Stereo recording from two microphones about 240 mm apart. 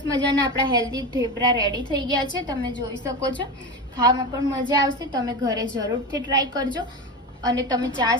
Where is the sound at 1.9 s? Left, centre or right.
Centre.